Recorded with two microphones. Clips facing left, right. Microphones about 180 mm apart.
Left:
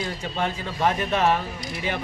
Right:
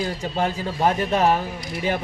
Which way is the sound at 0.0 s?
35° right (ahead or behind).